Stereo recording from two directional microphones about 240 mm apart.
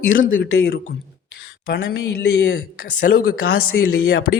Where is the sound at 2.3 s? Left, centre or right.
Left.